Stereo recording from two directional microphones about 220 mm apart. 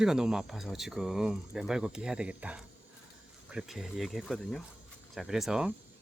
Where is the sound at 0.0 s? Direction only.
5° right (ahead or behind).